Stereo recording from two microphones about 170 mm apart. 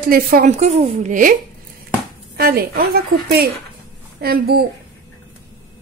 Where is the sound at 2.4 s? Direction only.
60° right (ahead or behind).